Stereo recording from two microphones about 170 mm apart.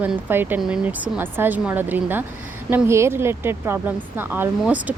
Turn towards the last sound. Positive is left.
turn(degrees=-10)  # may be behind; listen again after turning